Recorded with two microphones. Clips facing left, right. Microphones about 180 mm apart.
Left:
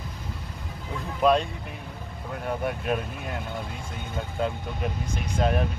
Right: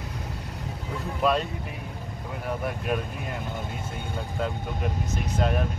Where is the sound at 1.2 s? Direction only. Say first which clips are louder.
Left 3 dB; centre (ahead or behind).